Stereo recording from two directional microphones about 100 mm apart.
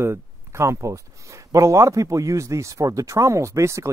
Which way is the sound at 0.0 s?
25° right (ahead or behind).